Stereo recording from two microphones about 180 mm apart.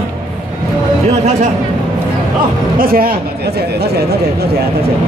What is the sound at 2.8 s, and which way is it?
A man's voice, 55° right (ahead or behind).